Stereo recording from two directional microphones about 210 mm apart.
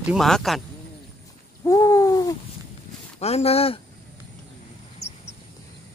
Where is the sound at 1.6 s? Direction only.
15° left (ahead or behind).